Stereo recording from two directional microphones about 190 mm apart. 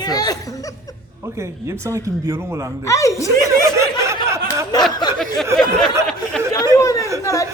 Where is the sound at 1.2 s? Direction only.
15° right (ahead or behind).